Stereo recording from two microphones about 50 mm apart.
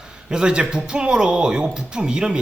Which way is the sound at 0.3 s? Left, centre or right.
Centre.